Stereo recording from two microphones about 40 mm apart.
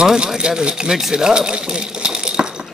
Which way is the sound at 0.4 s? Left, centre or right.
Right.